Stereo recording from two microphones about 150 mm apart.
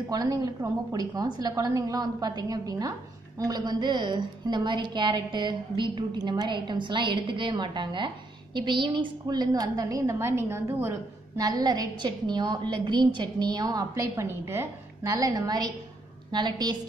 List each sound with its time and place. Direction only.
0.1 s a woman's voice: 25° right (ahead or behind)